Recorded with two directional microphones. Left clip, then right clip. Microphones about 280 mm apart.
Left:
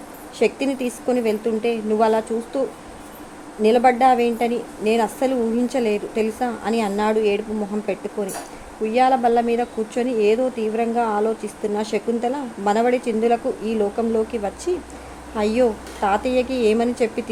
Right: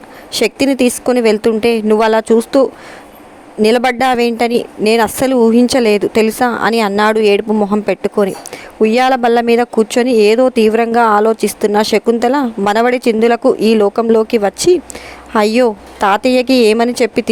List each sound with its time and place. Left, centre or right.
0.3 s speech: right
3.7 s speech: right